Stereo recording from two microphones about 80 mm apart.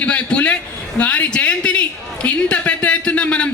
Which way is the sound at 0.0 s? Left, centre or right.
Centre.